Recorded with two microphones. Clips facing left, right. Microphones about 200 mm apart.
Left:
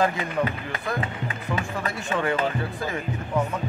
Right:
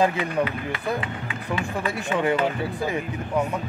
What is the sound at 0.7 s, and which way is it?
Speech, 40° left (ahead or behind).